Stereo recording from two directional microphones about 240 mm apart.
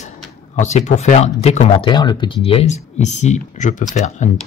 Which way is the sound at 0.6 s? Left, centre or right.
Left.